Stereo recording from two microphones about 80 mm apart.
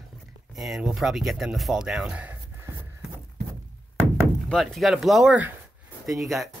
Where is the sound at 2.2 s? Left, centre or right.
Right.